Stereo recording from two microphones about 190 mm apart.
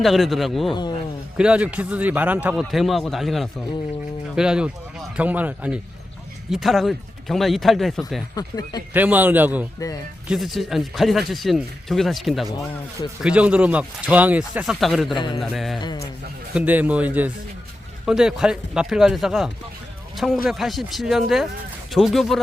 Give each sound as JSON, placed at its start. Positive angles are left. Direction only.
{"t": 0.0, "sound": "speech", "side_deg": 0}
{"t": 0.7, "sound": "speech", "side_deg": 25}
{"t": 1.4, "sound": "speech", "side_deg": -5}
{"t": 8.4, "sound": "speech", "side_deg": 20}
{"t": 8.9, "sound": "a man's voice", "side_deg": -10}
{"t": 15.1, "sound": "speech", "side_deg": 25}
{"t": 15.4, "sound": "speech", "side_deg": 0}
{"t": 15.8, "sound": "speech", "side_deg": 25}
{"t": 16.6, "sound": "a man's voice", "side_deg": -10}